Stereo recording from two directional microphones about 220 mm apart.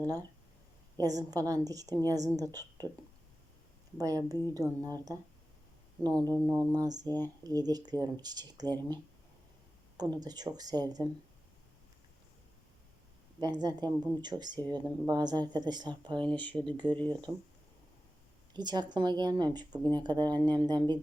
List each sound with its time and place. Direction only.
1.0 s speech: 15° right (ahead or behind)
3.9 s speech: 15° right (ahead or behind)
10.0 s speech: 20° right (ahead or behind)
13.4 s a woman's voice: 20° right (ahead or behind)
16.4 s speech: 5° left (ahead or behind)
16.6 s a woman's voice: 20° right (ahead or behind)
16.9 s speech: 5° left (ahead or behind)
18.5 s a woman's voice: 20° right (ahead or behind)